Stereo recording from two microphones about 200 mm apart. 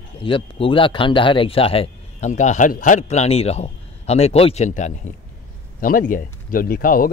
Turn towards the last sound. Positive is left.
turn(degrees=45)  # may be behind; listen again after turning